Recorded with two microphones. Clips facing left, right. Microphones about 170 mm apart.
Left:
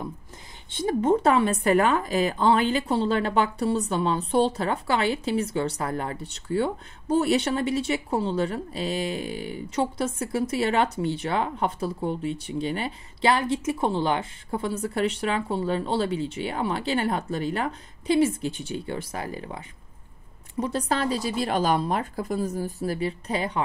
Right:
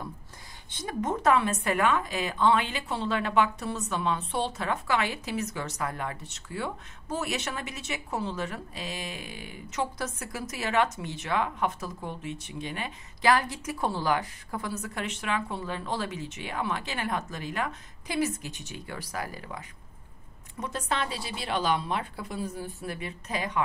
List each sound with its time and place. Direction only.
0.7 s a woman's voice: 25° left (ahead or behind)